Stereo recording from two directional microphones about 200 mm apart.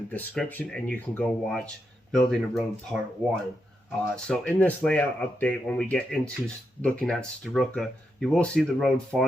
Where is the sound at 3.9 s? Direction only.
5° left (ahead or behind).